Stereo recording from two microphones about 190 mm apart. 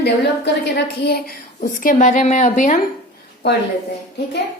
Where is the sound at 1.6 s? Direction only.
45° left (ahead or behind).